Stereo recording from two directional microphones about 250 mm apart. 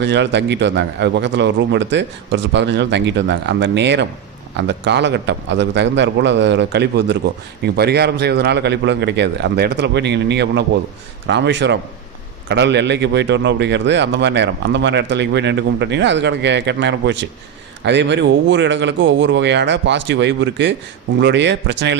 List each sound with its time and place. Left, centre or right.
0.0 s a man's voice: right